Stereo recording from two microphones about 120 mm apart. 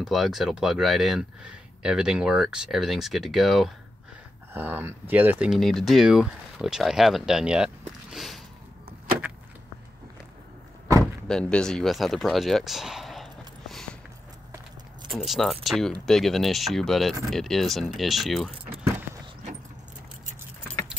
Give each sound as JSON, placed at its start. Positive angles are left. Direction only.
{"t": 0.0, "sound": "speech", "side_deg": 0}
{"t": 4.6, "sound": "speech", "side_deg": -15}
{"t": 5.5, "sound": "speech", "side_deg": 0}
{"t": 11.2, "sound": "speech", "side_deg": 5}
{"t": 15.0, "sound": "speech", "side_deg": 0}